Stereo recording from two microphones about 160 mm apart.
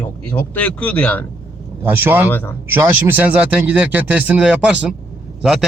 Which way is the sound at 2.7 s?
10° right (ahead or behind).